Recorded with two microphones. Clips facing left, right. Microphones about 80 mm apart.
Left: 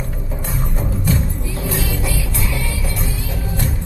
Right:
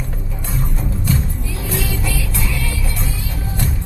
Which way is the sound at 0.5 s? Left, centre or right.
Left.